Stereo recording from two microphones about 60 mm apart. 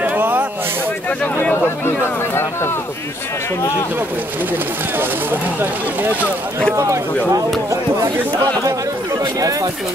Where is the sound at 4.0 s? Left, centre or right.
Right.